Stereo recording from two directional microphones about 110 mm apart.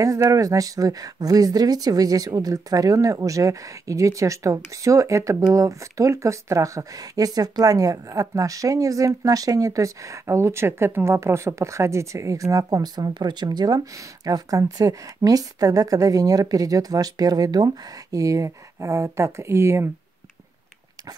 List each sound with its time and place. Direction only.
0.0 s speech: 30° right (ahead or behind)